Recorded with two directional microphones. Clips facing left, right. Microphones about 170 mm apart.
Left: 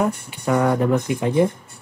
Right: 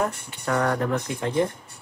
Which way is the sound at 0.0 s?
10° left (ahead or behind).